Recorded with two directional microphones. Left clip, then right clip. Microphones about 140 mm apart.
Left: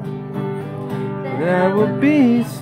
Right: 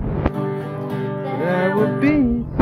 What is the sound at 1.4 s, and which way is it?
Music, 30° left (ahead or behind).